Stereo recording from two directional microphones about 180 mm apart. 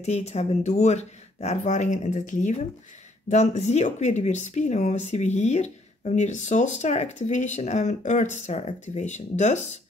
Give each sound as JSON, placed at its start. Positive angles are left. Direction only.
{"t": 0.0, "sound": "speech", "side_deg": 35}